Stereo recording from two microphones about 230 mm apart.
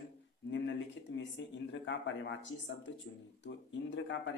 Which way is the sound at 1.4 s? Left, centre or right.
Left.